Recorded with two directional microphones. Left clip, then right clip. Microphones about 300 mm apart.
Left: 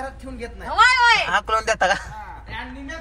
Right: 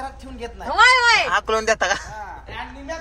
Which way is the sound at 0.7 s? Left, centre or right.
Right.